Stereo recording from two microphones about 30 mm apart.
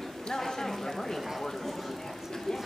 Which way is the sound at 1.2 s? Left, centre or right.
Centre.